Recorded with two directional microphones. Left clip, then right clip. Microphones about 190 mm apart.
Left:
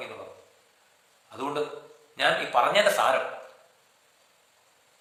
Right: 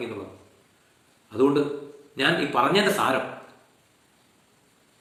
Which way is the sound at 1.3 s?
15° left (ahead or behind).